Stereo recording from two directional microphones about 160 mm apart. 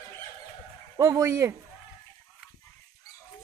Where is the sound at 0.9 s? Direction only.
20° right (ahead or behind).